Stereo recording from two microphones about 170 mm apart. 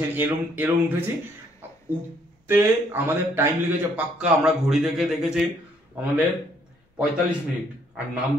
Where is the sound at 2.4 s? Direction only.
10° right (ahead or behind).